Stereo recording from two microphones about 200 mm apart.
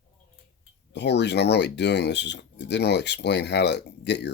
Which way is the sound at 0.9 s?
60° left (ahead or behind).